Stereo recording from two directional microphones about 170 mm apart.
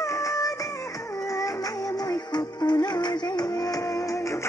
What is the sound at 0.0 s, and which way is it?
Music, 20° left (ahead or behind).